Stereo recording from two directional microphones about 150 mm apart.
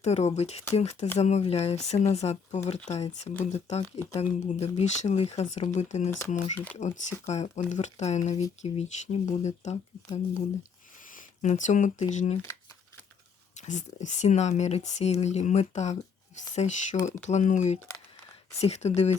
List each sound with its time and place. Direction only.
0.0 s speech: 50° left (ahead or behind)
11.1 s speech: 55° left (ahead or behind)
13.6 s speech: 50° left (ahead or behind)